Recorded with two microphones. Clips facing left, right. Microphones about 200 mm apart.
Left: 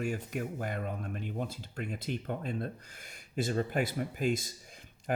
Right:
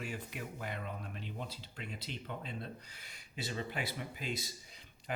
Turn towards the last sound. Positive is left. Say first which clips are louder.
# left 8 dB
turn(degrees=50)  # may be behind; listen again after turning